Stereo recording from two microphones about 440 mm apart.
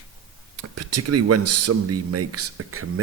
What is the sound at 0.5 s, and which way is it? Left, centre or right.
Speech, right.